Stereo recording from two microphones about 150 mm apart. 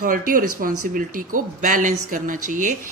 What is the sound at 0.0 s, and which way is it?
Speech, 70° right (ahead or behind).